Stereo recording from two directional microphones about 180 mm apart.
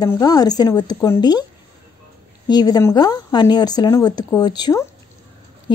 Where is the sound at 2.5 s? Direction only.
20° left (ahead or behind).